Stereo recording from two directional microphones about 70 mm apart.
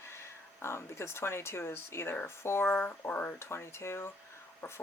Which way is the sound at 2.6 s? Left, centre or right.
Left.